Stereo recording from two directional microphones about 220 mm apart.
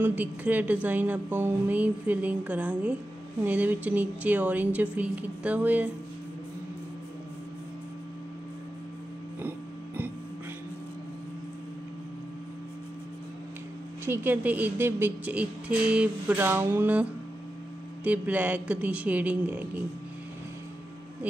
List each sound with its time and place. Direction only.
0.0 s a woman's voice: 10° right (ahead or behind)
9.4 s a sound: 10° right (ahead or behind)
14.0 s a woman's voice: 10° right (ahead or behind)